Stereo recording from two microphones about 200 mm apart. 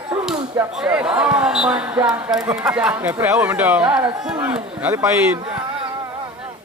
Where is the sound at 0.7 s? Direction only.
5° right (ahead or behind).